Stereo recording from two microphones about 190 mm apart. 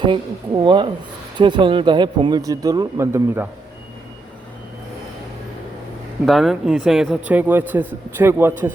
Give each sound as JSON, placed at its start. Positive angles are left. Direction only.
{"t": 0.0, "sound": "speech", "side_deg": -25}
{"t": 6.2, "sound": "a man's voice", "side_deg": 0}